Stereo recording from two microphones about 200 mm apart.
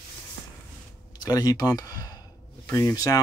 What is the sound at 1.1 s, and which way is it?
Speech, 20° left (ahead or behind).